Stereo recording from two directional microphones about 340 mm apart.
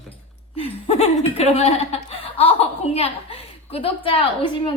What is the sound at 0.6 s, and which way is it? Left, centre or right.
Speech, centre.